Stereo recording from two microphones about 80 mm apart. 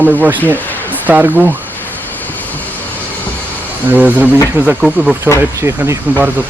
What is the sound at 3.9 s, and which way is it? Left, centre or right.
Speech, right.